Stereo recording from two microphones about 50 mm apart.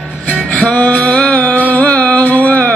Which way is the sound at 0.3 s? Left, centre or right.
Left.